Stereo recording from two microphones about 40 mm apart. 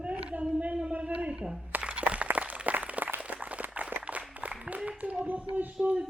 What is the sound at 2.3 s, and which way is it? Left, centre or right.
Applause, right.